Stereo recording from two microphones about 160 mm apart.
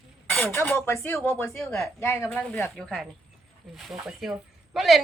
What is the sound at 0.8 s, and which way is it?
Speech, 15° left (ahead or behind).